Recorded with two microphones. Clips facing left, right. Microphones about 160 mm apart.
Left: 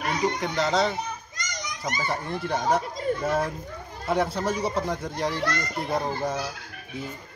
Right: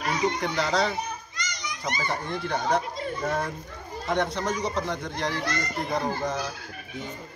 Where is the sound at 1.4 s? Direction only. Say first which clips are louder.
Left 1 dB; 45° left (ahead or behind).